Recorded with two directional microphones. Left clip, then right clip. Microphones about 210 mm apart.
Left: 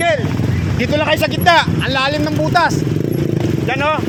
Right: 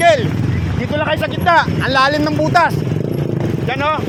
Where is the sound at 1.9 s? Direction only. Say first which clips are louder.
Right 5 dB; 15° right (ahead or behind).